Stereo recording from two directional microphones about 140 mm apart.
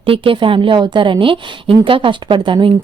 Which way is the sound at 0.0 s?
40° right (ahead or behind).